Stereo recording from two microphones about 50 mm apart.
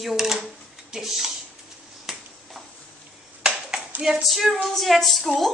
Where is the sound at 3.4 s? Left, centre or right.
Centre.